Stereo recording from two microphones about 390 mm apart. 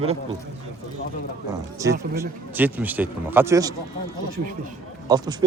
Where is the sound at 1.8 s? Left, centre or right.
Centre.